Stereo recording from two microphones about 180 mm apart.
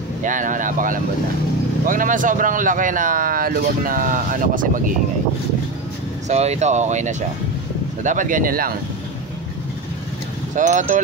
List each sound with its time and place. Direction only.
0.2 s speech: 45° right (ahead or behind)
6.2 s speech: 35° right (ahead or behind); by 8.7 s 55° right (ahead or behind)
10.5 s speech: 45° right (ahead or behind)